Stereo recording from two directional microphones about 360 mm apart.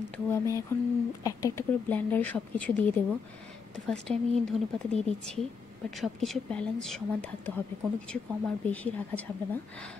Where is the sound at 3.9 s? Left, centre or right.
Centre.